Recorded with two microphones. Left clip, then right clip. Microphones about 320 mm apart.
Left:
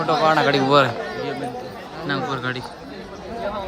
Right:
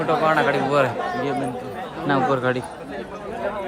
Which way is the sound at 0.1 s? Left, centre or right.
Left.